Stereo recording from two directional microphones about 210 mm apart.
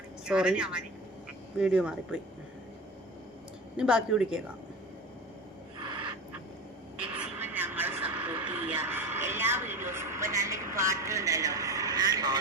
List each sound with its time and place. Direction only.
0.3 s a woman's voice: 5° right (ahead or behind)
3.8 s a woman's voice: 5° right (ahead or behind)
7.1 s a sound: 10° right (ahead or behind)